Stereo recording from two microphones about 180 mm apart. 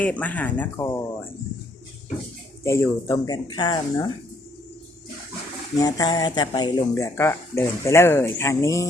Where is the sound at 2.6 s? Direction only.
15° left (ahead or behind).